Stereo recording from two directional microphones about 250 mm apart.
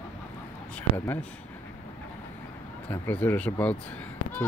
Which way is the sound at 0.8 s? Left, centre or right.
Centre.